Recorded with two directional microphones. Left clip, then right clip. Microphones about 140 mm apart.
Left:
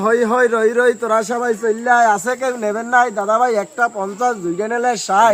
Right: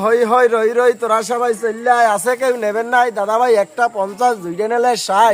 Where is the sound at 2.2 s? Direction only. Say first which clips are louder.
Right 4 dB; 30° right (ahead or behind).